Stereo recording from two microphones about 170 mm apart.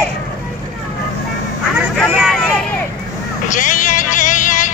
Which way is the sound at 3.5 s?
50° left (ahead or behind).